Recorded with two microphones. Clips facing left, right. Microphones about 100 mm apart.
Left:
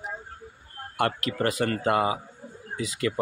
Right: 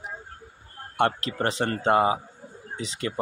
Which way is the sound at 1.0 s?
25° right (ahead or behind).